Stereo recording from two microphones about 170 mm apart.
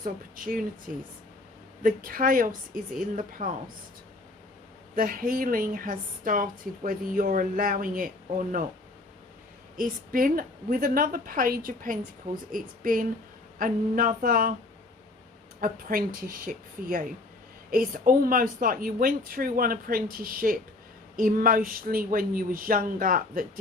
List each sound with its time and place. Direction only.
0.0 s a woman's voice: 55° right (ahead or behind)
1.8 s a woman's voice: 55° right (ahead or behind)
4.9 s a woman's voice: 55° right (ahead or behind)
9.7 s a woman's voice: 55° right (ahead or behind)
15.6 s a woman's voice: 55° right (ahead or behind)